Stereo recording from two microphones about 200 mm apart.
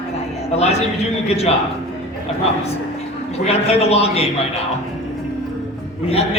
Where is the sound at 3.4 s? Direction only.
30° left (ahead or behind).